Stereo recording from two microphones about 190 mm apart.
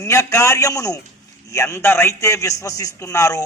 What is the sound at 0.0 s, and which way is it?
A man's voice, 15° left (ahead or behind).